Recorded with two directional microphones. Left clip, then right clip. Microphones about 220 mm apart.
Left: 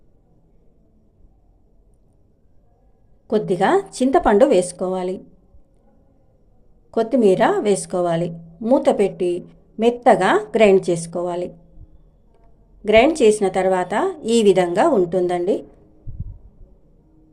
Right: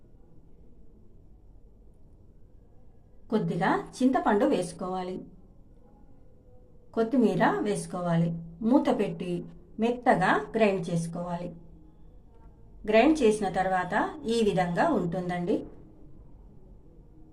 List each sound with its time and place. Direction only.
3.2 s a woman's voice: 35° left (ahead or behind)
6.9 s a woman's voice: 35° left (ahead or behind)
12.8 s a woman's voice: 40° left (ahead or behind)